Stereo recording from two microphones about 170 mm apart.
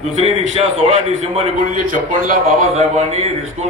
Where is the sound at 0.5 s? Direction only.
35° right (ahead or behind); by 2.3 s 50° right (ahead or behind).